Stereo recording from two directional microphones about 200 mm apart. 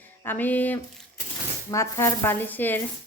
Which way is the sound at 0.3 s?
10° left (ahead or behind).